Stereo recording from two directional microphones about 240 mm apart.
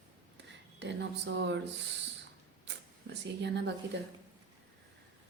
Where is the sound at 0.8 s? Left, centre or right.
Right.